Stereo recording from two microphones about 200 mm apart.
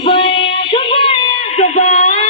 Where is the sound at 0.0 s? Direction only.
25° left (ahead or behind).